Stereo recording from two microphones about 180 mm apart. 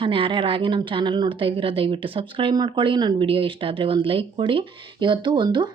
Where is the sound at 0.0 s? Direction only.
30° right (ahead or behind).